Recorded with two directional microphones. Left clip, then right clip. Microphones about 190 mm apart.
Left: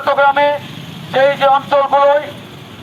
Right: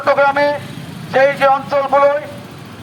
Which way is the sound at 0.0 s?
30° right (ahead or behind).